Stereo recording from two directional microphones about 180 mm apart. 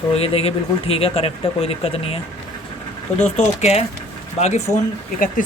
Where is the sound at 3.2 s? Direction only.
35° left (ahead or behind).